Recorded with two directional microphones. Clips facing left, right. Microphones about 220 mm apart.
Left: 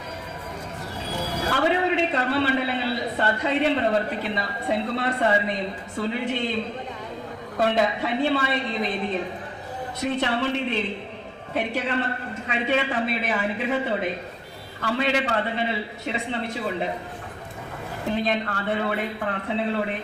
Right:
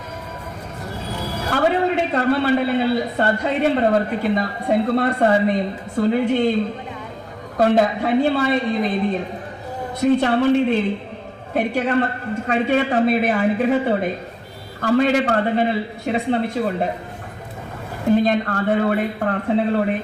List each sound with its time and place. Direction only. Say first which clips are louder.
1.7 s a man's voice: right 3 dB; 45° right (ahead or behind)
7.6 s a man's voice: right 6 dB; 45° right (ahead or behind)
10.0 s a man's voice: right 9 dB; 45° right (ahead or behind)
18.2 s a man's voice: right 7 dB; 45° right (ahead or behind)